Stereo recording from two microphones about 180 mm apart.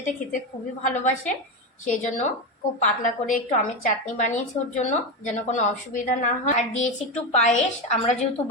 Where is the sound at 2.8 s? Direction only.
45° left (ahead or behind).